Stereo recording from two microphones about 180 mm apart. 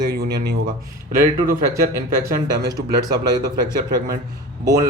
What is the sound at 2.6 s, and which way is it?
A man's voice, 20° right (ahead or behind).